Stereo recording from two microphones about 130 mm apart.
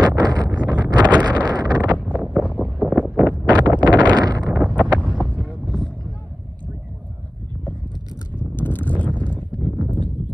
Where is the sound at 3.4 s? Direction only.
35° right (ahead or behind).